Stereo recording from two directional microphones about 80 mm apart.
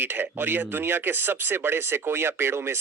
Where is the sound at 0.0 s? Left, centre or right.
Right.